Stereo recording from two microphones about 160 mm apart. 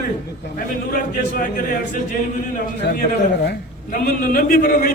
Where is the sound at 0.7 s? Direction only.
60° left (ahead or behind).